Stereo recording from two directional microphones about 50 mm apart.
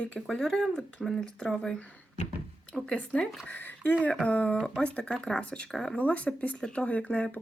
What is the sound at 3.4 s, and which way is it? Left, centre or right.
Speech, left.